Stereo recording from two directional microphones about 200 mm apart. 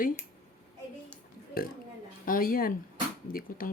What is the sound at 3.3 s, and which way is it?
Speech, 75° left (ahead or behind).